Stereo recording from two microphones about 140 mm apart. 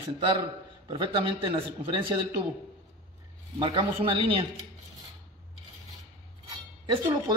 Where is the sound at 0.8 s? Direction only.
40° right (ahead or behind).